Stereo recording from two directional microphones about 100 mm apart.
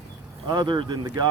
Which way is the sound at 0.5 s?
50° right (ahead or behind).